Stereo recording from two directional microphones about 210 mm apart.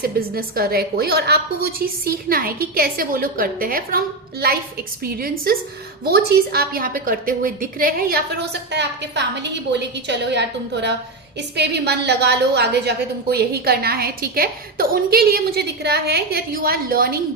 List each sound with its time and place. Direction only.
0.3 s a woman's voice: 45° right (ahead or behind)